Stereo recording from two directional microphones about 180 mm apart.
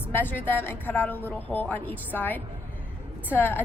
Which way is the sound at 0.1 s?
10° left (ahead or behind).